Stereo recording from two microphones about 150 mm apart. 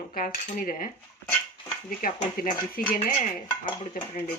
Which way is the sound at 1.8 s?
70° left (ahead or behind).